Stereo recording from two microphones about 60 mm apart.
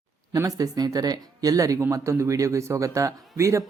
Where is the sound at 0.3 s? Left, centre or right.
Right.